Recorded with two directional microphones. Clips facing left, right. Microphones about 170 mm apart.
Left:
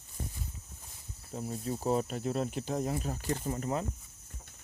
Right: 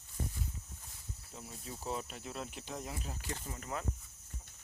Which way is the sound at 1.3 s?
45° left (ahead or behind).